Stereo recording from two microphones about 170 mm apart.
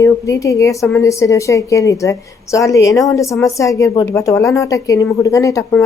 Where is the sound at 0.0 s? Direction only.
20° left (ahead or behind).